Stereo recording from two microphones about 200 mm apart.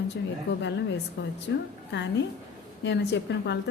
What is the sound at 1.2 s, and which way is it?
A woman's voice, 60° left (ahead or behind).